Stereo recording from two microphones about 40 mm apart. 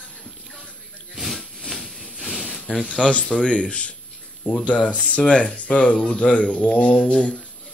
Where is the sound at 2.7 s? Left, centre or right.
Left.